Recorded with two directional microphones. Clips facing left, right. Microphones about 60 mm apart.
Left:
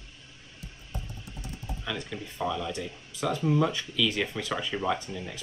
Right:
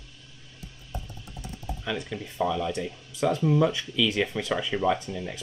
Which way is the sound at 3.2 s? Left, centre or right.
Centre.